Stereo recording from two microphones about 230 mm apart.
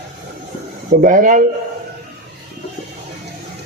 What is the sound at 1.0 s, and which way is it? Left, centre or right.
Speech, right.